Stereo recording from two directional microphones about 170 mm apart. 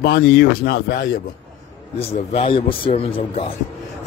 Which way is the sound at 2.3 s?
30° left (ahead or behind).